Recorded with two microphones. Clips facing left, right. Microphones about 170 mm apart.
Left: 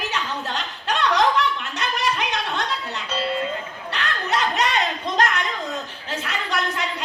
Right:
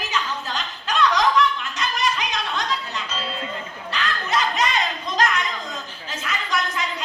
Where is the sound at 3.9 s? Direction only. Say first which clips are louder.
Even; 65° left (ahead or behind).